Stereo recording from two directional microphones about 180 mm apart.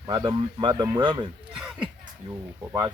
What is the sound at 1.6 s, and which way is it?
Speech, 5° right (ahead or behind).